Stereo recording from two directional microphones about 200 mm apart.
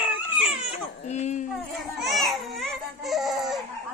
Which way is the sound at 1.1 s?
35° left (ahead or behind).